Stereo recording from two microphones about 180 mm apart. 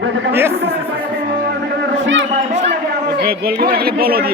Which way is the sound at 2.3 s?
40° right (ahead or behind).